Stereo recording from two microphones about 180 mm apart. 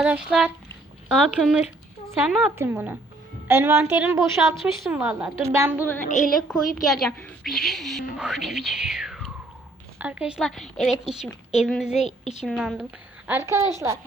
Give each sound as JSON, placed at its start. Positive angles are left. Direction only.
{"t": 0.0, "sound": "a woman's voice", "side_deg": -5}
{"t": 4.5, "sound": "a woman's voice", "side_deg": 0}
{"t": 4.9, "sound": "a woman's voice", "side_deg": -10}
{"t": 6.1, "sound": "a woman's voice", "side_deg": 40}
{"t": 6.3, "sound": "a woman's voice", "side_deg": 0}